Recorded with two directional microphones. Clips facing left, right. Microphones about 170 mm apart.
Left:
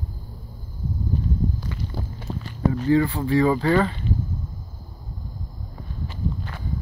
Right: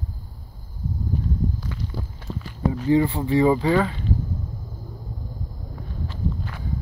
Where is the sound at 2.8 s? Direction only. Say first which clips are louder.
Right 1 dB; 20° right (ahead or behind).